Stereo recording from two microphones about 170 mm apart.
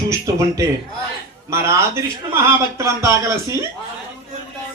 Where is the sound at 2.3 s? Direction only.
15° right (ahead or behind).